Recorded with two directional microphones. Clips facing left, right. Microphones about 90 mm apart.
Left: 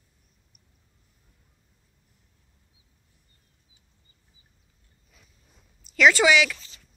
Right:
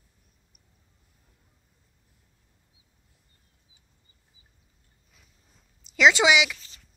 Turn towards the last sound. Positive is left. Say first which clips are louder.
# left 1 dB
turn(degrees=-15)  # may be behind; listen again after turning